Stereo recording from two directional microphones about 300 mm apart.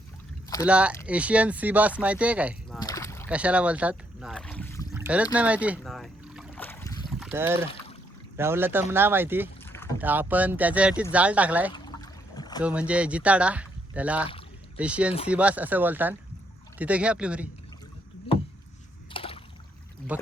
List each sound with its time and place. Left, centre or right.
0.6 s speech: centre
2.8 s rowboat: centre
3.2 s rowboat: centre
4.9 s boat: centre
7.1 s boat: centre
8.4 s speech: centre
11.7 s trickle: centre
12.6 s speech: centre
19.1 s rowboat: centre
20.1 s speech: centre